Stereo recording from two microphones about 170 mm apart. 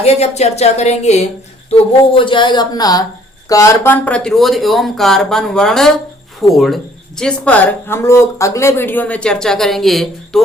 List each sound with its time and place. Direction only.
0.0 s a woman's voice: 40° left (ahead or behind)
1.7 s a woman's voice: 30° left (ahead or behind); by 10.4 s centre (ahead or behind)